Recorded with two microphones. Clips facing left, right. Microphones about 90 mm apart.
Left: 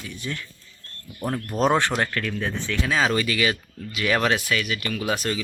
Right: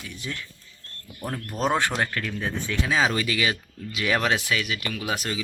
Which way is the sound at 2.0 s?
15° right (ahead or behind).